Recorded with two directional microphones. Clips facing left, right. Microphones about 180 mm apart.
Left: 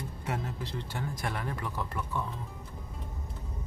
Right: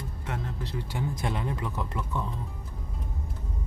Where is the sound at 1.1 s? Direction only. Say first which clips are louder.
Right 4 dB; 20° right (ahead or behind).